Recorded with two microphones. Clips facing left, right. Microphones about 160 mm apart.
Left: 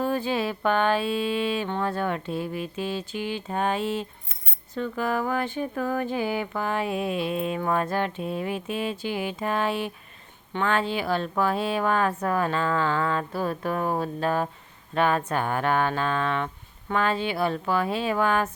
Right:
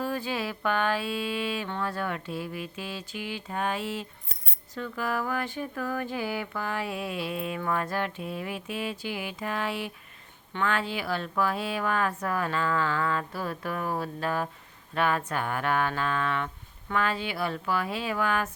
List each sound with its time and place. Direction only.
0.0 s speech: 25° left (ahead or behind)